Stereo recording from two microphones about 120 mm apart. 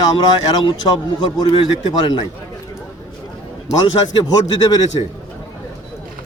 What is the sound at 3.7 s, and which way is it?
A man's voice, 40° left (ahead or behind).